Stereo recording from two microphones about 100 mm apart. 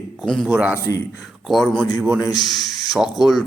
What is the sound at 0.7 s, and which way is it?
Speech, 30° left (ahead or behind).